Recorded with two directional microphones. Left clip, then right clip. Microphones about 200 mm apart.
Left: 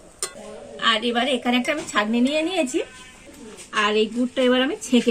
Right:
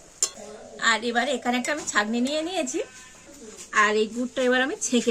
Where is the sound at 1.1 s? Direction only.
15° right (ahead or behind).